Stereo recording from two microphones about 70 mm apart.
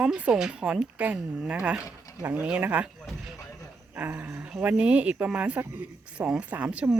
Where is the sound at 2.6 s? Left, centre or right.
Right.